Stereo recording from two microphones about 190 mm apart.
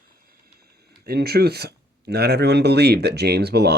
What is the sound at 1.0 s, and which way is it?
Speech, 55° right (ahead or behind).